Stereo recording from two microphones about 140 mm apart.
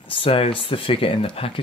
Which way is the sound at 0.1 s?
40° left (ahead or behind).